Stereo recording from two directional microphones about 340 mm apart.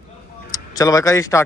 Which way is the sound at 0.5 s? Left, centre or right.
Centre.